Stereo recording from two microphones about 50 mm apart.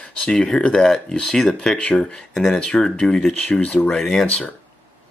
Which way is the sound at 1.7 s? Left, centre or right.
Left.